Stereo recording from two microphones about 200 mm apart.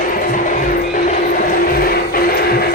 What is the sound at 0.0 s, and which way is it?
Music, 40° left (ahead or behind).